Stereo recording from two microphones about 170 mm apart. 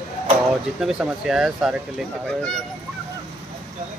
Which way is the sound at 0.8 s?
5° right (ahead or behind).